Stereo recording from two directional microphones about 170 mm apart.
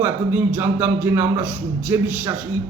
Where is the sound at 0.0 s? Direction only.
10° right (ahead or behind).